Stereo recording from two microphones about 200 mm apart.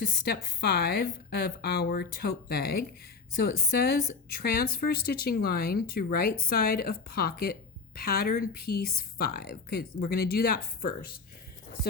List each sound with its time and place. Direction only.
0.6 s speech: 50° left (ahead or behind)